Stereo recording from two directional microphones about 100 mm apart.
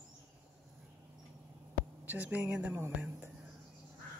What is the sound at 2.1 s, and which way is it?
Speech, 15° right (ahead or behind).